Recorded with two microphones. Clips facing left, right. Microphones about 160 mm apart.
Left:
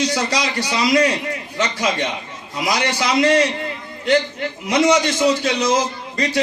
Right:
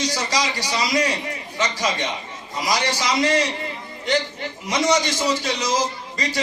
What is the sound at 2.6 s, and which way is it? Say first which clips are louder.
Speech: left 2 dB; 60° left (ahead or behind).